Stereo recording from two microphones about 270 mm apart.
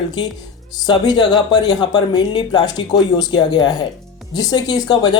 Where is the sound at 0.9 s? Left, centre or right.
Centre.